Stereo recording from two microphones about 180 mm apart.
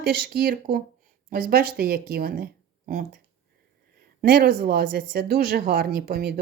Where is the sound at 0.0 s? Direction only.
60° right (ahead or behind).